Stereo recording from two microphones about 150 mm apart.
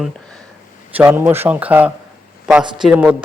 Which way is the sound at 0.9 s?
10° right (ahead or behind).